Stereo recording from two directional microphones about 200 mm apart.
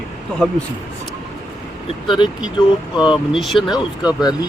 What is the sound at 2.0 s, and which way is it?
Speech, 25° left (ahead or behind).